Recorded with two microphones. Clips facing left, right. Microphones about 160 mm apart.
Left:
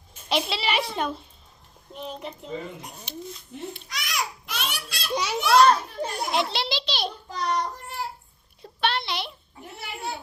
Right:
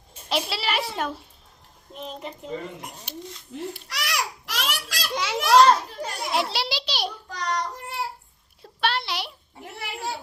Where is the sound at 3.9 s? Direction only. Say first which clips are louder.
Right 1 dB; 70° right (ahead or behind); by 5.1 s 90° right.